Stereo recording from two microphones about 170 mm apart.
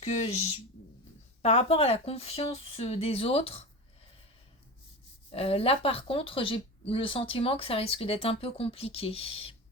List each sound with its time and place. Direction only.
0.0 s speech: 40° left (ahead or behind)
5.3 s speech: 35° left (ahead or behind)